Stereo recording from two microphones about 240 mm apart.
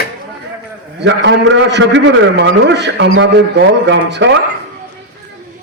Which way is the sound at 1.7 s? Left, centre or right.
Right.